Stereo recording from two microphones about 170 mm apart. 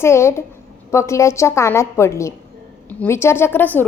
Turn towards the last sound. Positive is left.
turn(degrees=10)  # may be behind; listen again after turning